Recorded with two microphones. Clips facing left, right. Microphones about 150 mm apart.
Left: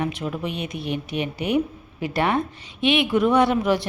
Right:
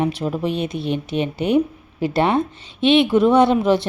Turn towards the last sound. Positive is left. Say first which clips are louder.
# right 4 dB
turn(degrees=-25)  # may be behind; listen again after turning